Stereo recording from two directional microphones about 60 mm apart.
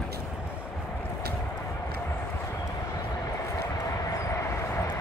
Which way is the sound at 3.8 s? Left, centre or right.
Left.